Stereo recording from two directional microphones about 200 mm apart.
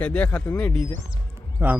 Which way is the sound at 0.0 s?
5° left (ahead or behind).